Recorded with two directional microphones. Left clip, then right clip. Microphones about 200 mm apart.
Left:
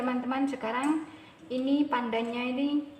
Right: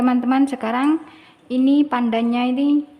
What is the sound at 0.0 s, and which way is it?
Speech, 65° right (ahead or behind).